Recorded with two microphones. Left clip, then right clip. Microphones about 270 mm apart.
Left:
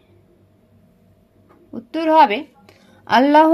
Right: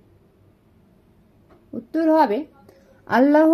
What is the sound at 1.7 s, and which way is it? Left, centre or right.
A woman's voice, left.